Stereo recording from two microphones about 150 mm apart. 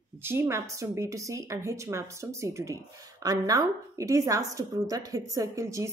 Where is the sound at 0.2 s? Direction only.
15° right (ahead or behind).